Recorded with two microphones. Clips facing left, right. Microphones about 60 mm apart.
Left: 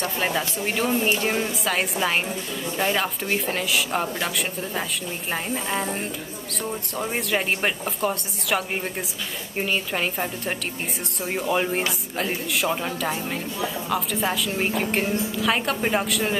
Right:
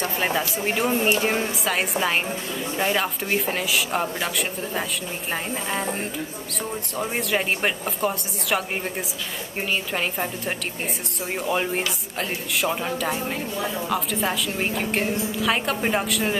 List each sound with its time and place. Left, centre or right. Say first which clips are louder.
0.0 s speech: right 1 dB; centre
1.6 s a woman's voice: even; centre